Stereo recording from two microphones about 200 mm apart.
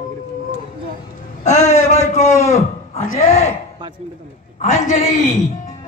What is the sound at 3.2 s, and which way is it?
Speech, 35° left (ahead or behind).